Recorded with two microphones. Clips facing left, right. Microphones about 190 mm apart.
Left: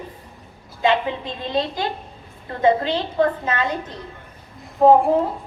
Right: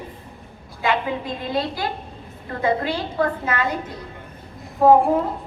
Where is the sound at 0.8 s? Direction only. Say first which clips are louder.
Left 3 dB; 25° left (ahead or behind).